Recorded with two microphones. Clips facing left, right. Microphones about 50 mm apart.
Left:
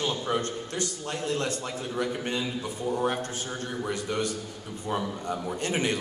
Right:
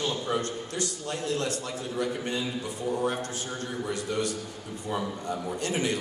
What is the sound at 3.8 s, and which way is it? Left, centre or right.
A man's voice, left.